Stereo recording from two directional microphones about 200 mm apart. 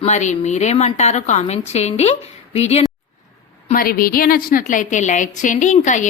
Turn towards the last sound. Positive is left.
turn(degrees=40)  # may be behind; listen again after turning